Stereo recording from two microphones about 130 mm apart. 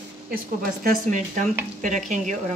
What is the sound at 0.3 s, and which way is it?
Speech, 90° right.